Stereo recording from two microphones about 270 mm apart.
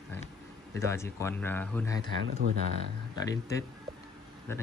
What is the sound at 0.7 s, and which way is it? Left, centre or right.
Speech, centre.